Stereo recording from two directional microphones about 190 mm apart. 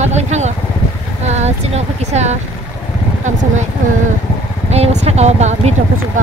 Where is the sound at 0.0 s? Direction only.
35° right (ahead or behind).